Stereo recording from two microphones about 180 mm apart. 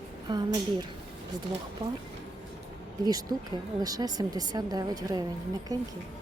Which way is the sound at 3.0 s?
20° right (ahead or behind).